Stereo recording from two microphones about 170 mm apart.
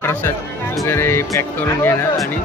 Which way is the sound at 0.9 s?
15° left (ahead or behind).